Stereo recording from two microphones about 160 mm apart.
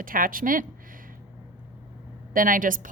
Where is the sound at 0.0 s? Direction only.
60° right (ahead or behind).